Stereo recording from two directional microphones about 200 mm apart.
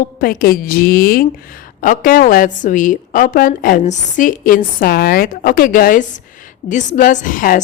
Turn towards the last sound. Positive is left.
turn(degrees=45)  # may be behind; listen again after turning